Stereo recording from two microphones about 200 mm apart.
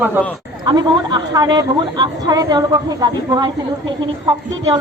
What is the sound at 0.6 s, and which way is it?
Speech, 20° right (ahead or behind).